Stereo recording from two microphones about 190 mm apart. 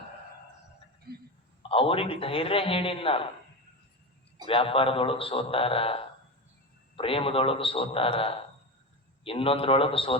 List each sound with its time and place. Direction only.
1.1 s a sound: 55° right (ahead or behind)
1.6 s a man's voice: 30° left (ahead or behind)
4.4 s a man's voice: 30° left (ahead or behind)